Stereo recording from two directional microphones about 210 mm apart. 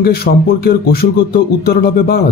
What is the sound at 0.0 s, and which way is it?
Speech, 45° left (ahead or behind).